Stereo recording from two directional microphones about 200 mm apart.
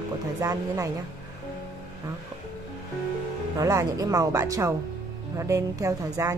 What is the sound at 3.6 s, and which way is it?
Speech, 15° right (ahead or behind).